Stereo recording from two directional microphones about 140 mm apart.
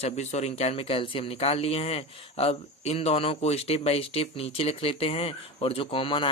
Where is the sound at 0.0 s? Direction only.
55° left (ahead or behind).